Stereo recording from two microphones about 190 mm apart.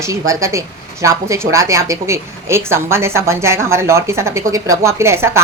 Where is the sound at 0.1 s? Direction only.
15° right (ahead or behind).